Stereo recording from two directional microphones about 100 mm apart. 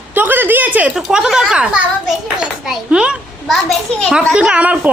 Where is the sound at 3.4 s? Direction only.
10° left (ahead or behind).